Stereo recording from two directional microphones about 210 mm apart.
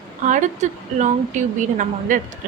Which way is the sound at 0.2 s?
35° right (ahead or behind).